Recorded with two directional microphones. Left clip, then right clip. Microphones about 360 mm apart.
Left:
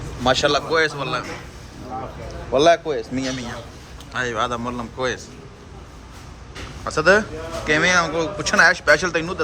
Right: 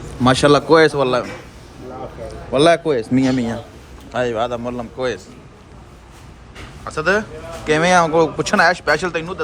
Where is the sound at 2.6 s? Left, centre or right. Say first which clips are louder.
Right 3 dB; centre.